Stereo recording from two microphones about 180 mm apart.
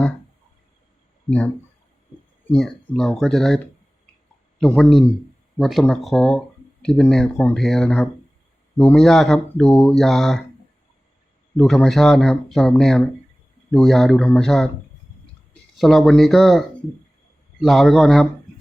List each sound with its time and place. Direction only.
2.6 s speech: 5° left (ahead or behind)
4.6 s speech: 5° left (ahead or behind)
11.5 s speech: 5° left (ahead or behind)
15.8 s speech: centre (ahead or behind)